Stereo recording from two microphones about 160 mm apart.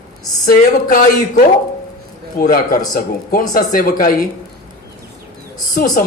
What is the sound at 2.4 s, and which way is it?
A man's voice, 60° left (ahead or behind).